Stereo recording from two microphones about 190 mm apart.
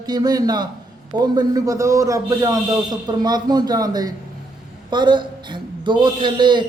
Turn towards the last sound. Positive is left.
turn(degrees=-25)  # may be behind; listen again after turning